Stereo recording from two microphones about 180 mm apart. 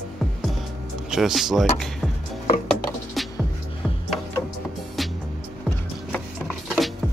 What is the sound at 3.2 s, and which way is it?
Music, centre (ahead or behind).